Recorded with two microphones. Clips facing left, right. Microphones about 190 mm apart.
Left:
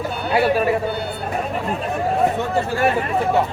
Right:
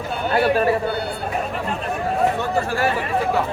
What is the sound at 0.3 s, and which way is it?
Speech, 10° left (ahead or behind).